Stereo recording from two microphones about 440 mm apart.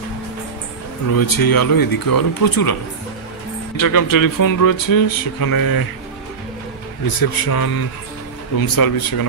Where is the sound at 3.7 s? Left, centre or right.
Left.